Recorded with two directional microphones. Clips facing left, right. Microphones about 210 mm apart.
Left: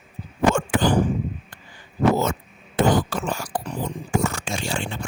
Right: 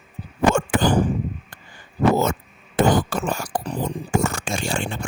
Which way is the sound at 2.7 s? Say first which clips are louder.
Right 1 dB; 45° right (ahead or behind).